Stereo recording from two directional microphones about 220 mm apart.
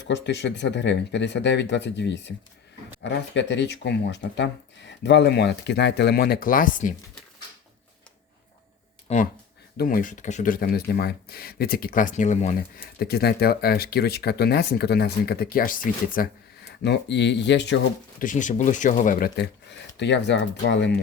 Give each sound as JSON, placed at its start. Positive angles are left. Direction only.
{"t": 0.0, "sound": "speech", "side_deg": 50}
{"t": 9.1, "sound": "speech", "side_deg": 30}
{"t": 9.7, "sound": "speech", "side_deg": 40}
{"t": 16.8, "sound": "speech", "side_deg": 50}
{"t": 18.2, "sound": "speech", "side_deg": 35}